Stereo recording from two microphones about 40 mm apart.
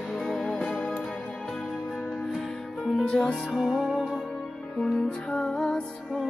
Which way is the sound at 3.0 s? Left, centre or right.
Centre.